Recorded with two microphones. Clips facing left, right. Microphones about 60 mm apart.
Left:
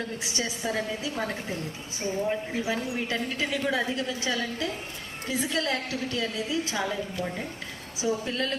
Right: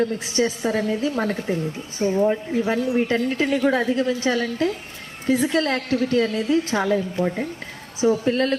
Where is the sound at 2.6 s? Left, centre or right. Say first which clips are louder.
Right 9 dB; right.